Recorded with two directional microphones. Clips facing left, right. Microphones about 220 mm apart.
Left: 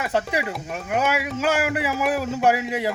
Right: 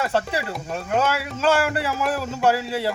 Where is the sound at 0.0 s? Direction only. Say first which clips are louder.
Even; 15° left (ahead or behind).